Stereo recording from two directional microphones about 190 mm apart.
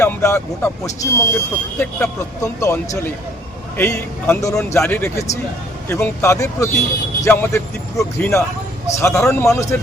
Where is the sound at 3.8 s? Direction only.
10° left (ahead or behind).